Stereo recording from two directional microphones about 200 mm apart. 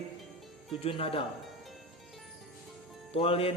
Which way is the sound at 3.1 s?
30° left (ahead or behind).